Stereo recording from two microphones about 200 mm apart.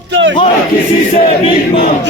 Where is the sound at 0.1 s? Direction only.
65° right (ahead or behind).